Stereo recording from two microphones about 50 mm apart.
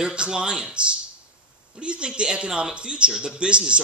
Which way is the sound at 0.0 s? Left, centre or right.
Centre.